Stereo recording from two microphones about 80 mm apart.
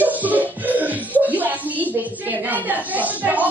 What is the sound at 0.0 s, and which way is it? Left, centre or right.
Music, right.